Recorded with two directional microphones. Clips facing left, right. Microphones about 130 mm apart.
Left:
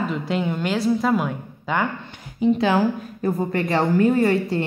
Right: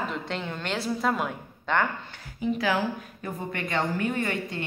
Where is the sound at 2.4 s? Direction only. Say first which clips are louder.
Left 8 dB; 25° left (ahead or behind).